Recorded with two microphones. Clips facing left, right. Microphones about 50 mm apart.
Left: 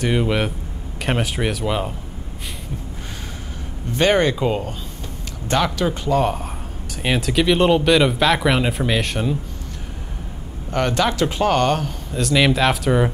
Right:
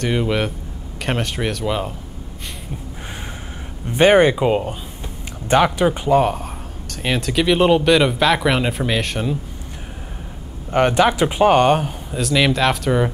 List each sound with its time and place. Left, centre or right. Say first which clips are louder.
0.0 s speech: even; centre
3.9 s speech: right 4 dB; right
6.2 s speech: right 1 dB; centre
10.7 s speech: right 4 dB; right
12.2 s speech: even; centre